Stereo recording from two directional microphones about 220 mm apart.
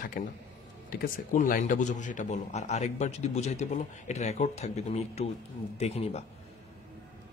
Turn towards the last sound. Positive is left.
turn(degrees=30)  # may be behind; listen again after turning